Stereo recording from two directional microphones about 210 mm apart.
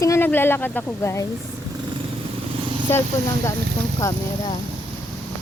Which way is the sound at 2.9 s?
10° left (ahead or behind).